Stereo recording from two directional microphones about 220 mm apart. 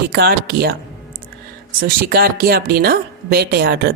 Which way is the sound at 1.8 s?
45° right (ahead or behind).